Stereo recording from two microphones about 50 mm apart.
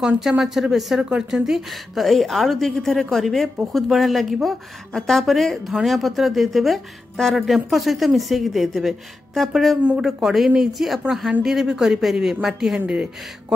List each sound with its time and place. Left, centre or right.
0.2 s speech: centre
1.4 s speech: centre
12.8 s speech: centre